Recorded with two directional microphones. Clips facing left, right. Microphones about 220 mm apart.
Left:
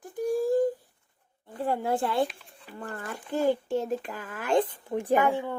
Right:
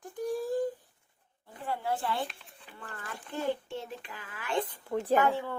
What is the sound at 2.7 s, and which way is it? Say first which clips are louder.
Speech: left 7 dB; 45° left (ahead or behind).